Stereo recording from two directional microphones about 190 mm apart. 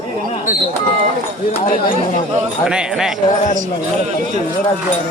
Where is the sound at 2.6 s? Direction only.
5° right (ahead or behind).